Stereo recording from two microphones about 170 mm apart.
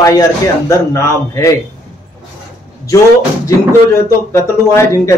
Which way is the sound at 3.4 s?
15° left (ahead or behind).